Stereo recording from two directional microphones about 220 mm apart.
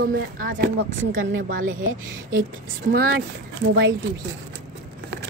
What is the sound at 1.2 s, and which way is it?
Speech, 60° right (ahead or behind).